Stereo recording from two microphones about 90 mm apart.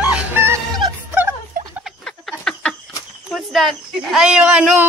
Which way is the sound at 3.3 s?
Centre (ahead or behind).